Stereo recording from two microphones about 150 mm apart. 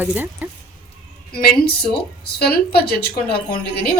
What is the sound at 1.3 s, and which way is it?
A woman's voice, 80° left.